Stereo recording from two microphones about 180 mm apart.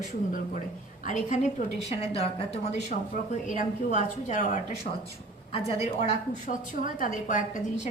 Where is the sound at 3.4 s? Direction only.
45° left (ahead or behind).